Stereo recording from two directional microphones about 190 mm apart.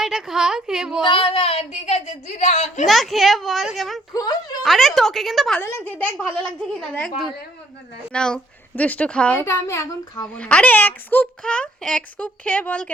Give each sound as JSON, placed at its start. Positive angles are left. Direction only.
{"t": 0.0, "sound": "a woman's voice", "side_deg": 0}
{"t": 1.0, "sound": "speech", "side_deg": 30}
{"t": 2.8, "sound": "a woman's voice", "side_deg": 0}
{"t": 4.1, "sound": "speech", "side_deg": 20}
{"t": 4.6, "sound": "a woman's voice", "side_deg": 0}
{"t": 8.1, "sound": "a woman's voice", "side_deg": 5}